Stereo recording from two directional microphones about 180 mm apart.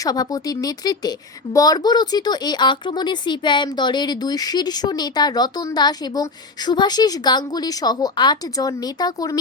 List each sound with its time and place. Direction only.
0.0 s speech: 20° left (ahead or behind)